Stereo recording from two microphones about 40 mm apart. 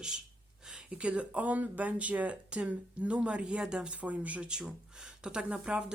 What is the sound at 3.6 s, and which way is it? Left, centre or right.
Speech, centre.